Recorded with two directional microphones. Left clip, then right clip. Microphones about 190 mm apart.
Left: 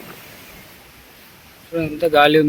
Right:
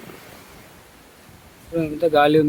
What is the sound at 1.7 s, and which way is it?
Speech, 5° right (ahead or behind).